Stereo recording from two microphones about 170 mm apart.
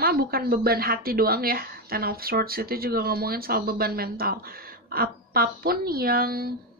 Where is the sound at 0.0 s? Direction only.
60° right (ahead or behind).